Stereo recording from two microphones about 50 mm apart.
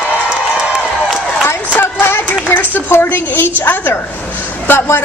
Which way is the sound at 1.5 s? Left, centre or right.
Left.